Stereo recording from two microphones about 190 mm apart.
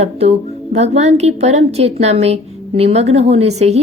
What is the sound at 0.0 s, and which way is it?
A woman's voice, 35° right (ahead or behind).